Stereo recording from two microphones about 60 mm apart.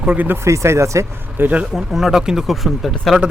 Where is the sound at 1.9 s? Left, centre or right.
Centre.